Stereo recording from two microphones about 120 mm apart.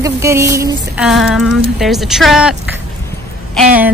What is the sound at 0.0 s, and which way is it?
Speech, 25° right (ahead or behind).